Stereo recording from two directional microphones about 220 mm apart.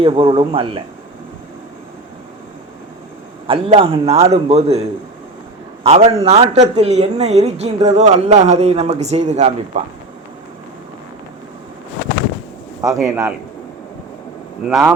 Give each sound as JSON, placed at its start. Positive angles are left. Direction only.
{"t": 0.0, "sound": "speech", "side_deg": -25}
{"t": 3.4, "sound": "speech", "side_deg": -25}
{"t": 12.8, "sound": "a man's voice", "side_deg": -15}
{"t": 14.6, "sound": "speech", "side_deg": -5}